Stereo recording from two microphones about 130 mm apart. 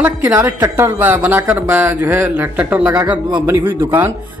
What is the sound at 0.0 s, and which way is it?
Speech, 20° right (ahead or behind).